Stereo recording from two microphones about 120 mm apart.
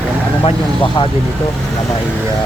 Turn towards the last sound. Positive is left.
turn(degrees=45)  # may be behind; listen again after turning